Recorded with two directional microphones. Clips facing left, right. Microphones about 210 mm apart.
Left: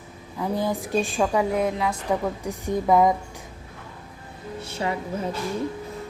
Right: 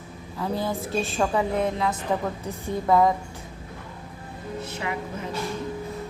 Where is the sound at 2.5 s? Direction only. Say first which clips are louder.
Left 2 dB; 15° left (ahead or behind).